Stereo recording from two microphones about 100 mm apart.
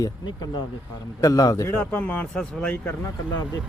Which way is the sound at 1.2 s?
40° left (ahead or behind).